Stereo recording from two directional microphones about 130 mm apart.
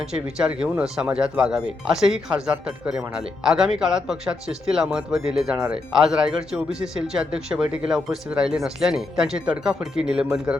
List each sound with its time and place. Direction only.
0.1 s speech: 5° right (ahead or behind)